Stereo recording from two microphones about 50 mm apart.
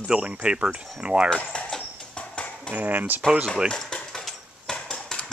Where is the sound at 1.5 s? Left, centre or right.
Centre.